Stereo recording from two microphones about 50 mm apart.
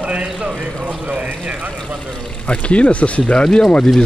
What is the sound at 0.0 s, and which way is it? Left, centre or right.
Speech, right.